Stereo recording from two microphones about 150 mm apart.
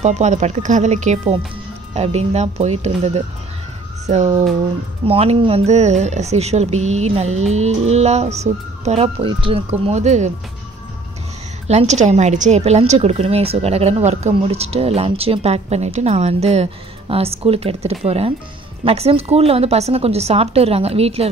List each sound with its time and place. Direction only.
0.0 s speech: 50° right (ahead or behind)
11.6 s speech: 45° right (ahead or behind)